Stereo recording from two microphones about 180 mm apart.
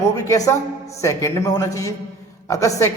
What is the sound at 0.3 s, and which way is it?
A woman's voice, 20° left (ahead or behind).